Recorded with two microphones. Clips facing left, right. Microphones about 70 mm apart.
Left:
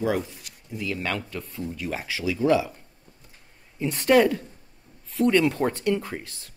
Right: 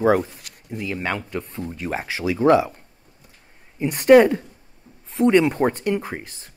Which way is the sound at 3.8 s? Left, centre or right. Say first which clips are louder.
Right 6 dB; centre.